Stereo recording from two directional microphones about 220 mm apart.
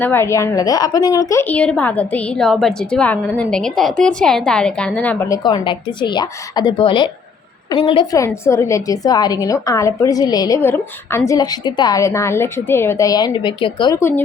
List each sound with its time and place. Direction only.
0.0 s a woman's voice: 10° left (ahead or behind)